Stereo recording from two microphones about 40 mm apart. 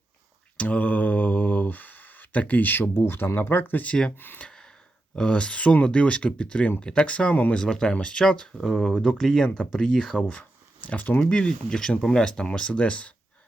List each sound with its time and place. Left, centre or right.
0.5 s a sound: left
2.9 s speech: left
3.5 s speech: left
5.1 s speech: left
7.5 s speech: centre
8.5 s speech: centre
9.0 s speech: centre
10.2 s speech: left
11.2 s speech: left